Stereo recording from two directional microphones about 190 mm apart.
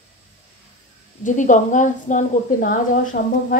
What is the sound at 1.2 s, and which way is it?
A woman's voice, 40° left (ahead or behind).